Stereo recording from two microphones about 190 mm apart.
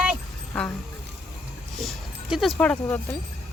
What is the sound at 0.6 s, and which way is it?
Speech, 5° left (ahead or behind).